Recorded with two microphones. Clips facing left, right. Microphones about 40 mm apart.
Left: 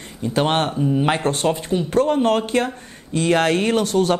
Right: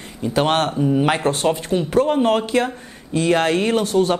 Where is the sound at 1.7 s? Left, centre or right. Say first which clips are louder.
Right 1 dB; centre.